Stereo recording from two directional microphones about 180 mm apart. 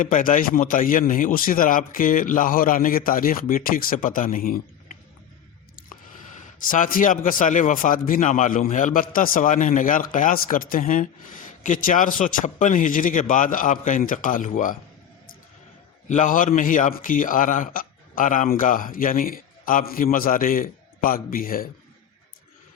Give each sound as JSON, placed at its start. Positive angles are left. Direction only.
{"t": 0.0, "sound": "speech", "side_deg": 50}
{"t": 16.0, "sound": "speech", "side_deg": 45}